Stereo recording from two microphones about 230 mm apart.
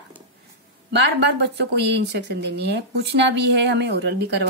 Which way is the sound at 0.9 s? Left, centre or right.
Right.